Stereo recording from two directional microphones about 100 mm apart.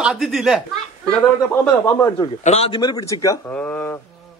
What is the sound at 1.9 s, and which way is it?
Speech, 30° left (ahead or behind).